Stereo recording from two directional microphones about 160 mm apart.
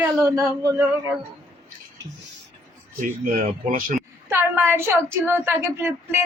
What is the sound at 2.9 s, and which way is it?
Speech, 55° right (ahead or behind).